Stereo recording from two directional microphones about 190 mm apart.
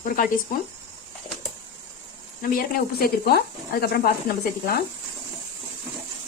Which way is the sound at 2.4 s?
50° left (ahead or behind).